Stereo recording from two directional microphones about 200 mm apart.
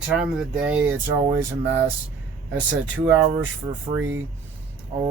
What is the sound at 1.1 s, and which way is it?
Speech, 15° right (ahead or behind).